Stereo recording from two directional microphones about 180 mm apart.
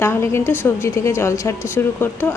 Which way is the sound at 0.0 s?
15° left (ahead or behind).